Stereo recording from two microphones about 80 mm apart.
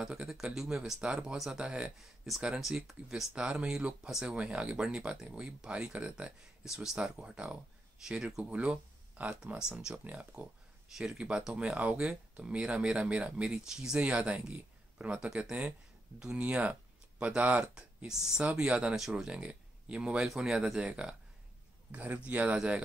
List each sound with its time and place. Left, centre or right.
0.1 s speech: centre